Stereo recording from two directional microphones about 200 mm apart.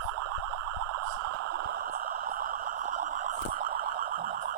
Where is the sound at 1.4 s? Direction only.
55° right (ahead or behind).